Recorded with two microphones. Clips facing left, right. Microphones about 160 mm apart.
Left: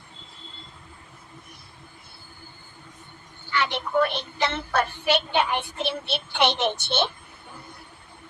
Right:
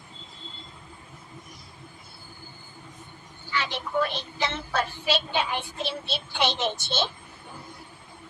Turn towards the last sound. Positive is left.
turn(degrees=65)  # may be behind; listen again after turning